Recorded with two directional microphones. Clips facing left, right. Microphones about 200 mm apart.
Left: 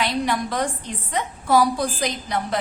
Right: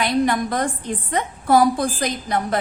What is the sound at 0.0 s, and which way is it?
A woman's voice, 50° right (ahead or behind).